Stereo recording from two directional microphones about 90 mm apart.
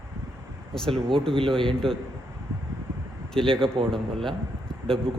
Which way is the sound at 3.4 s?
70° right (ahead or behind).